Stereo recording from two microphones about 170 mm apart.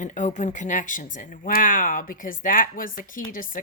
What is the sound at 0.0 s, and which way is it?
Speech, 45° left (ahead or behind).